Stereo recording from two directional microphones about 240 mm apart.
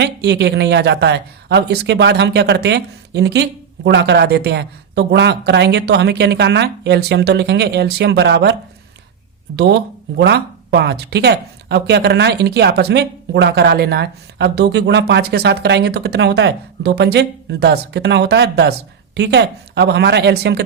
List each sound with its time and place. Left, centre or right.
0.0 s speech: right
9.6 s speech: right